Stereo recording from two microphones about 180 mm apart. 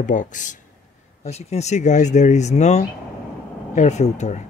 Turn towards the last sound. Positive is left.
turn(degrees=40)  # may be behind; listen again after turning